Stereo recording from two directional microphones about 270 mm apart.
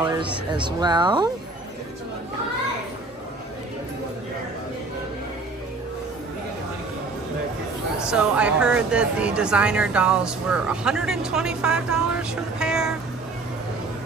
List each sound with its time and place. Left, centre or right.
0.0 s speech: centre
8.1 s speech: centre